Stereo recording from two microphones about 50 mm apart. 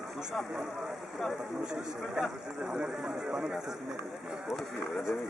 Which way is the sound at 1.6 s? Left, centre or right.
Centre.